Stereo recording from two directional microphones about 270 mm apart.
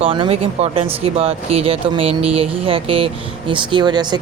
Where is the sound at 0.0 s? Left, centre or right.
Centre.